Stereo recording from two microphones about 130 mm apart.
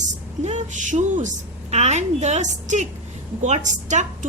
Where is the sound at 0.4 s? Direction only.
70° right (ahead or behind).